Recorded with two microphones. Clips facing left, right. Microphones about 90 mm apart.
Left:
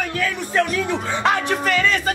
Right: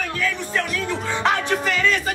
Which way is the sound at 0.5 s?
15° left (ahead or behind).